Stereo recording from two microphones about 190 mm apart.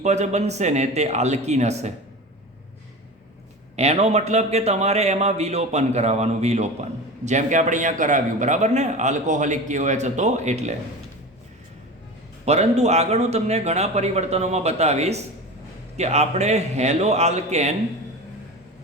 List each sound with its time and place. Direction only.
0.0 s a man's voice: 35° right (ahead or behind)
3.8 s a man's voice: 35° right (ahead or behind)
12.5 s a man's voice: 35° right (ahead or behind)